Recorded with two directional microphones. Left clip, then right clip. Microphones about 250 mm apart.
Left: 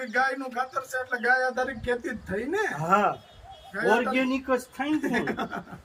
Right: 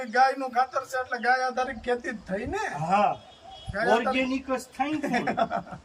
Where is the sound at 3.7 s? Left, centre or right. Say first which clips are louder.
Even; centre.